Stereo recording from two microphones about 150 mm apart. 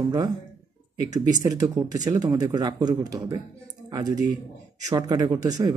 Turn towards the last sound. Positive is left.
turn(degrees=-25)  # may be behind; listen again after turning